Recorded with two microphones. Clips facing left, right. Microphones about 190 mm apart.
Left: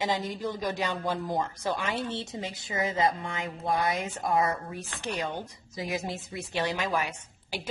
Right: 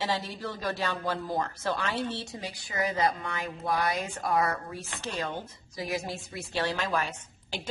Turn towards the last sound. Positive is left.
turn(degrees=10)  # may be behind; listen again after turning